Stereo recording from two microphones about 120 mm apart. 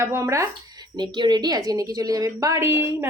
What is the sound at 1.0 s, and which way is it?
Speech, 40° right (ahead or behind).